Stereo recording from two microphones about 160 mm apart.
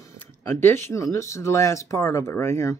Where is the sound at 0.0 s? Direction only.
15° left (ahead or behind).